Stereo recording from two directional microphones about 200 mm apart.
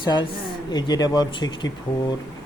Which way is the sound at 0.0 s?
20° left (ahead or behind).